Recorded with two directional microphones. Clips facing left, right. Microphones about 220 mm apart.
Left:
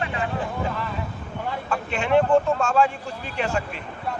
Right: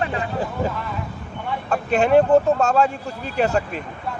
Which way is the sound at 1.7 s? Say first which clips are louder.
Right 5 dB; 40° right (ahead or behind).